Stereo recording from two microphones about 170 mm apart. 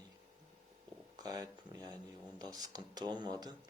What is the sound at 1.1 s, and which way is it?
Speech, 20° right (ahead or behind).